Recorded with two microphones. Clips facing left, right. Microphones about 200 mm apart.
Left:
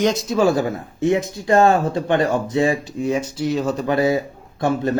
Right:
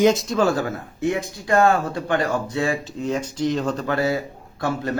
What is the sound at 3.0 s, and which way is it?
Speech, 10° left (ahead or behind).